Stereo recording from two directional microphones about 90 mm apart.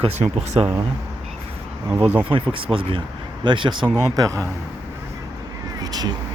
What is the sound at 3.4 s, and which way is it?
Speech, 65° right (ahead or behind).